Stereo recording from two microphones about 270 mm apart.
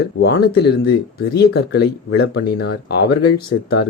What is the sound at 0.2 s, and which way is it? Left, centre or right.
Speech, left.